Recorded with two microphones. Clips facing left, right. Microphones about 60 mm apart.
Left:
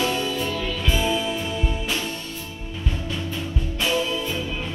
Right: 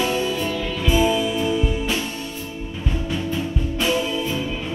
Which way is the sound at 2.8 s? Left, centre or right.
Centre.